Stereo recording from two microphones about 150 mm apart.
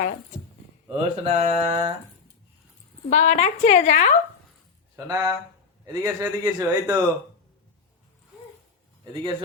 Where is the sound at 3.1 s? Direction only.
55° left (ahead or behind).